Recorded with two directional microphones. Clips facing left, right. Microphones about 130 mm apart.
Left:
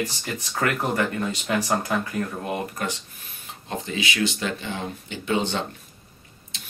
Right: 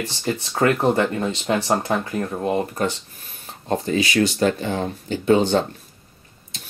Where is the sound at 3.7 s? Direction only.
40° right (ahead or behind).